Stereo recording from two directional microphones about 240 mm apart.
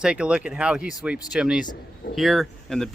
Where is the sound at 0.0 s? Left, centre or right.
Centre.